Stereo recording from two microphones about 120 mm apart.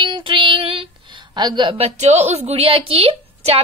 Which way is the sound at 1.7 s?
60° right (ahead or behind).